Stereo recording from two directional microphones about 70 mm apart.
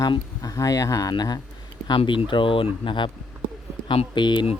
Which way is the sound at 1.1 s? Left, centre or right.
Left.